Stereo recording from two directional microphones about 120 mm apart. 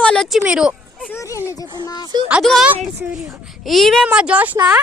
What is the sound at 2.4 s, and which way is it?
Speech, centre (ahead or behind).